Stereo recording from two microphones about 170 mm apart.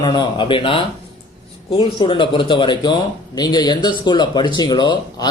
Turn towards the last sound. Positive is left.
turn(degrees=25)  # may be behind; listen again after turning